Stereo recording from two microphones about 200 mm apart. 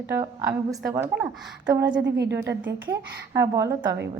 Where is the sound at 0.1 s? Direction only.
15° right (ahead or behind).